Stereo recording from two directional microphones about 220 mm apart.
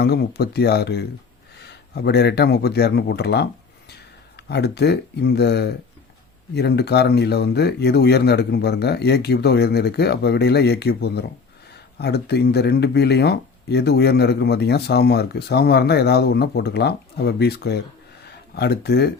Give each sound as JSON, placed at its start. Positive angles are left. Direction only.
{"t": 0.0, "sound": "speech", "side_deg": 45}